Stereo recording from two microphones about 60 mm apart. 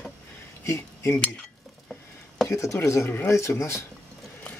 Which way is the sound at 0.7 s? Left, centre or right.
Left.